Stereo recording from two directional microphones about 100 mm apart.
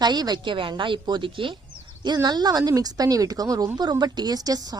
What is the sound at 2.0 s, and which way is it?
Speech, 45° right (ahead or behind).